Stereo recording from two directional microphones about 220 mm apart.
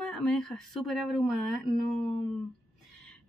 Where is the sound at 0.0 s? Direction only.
5° left (ahead or behind).